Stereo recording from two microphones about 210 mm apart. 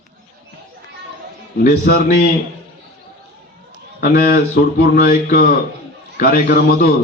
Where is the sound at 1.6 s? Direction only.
40° left (ahead or behind).